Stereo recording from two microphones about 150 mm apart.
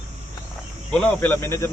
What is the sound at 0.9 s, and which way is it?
Speech, 5° left (ahead or behind).